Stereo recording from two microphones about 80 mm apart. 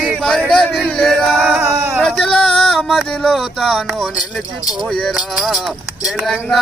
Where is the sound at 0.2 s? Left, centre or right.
Centre.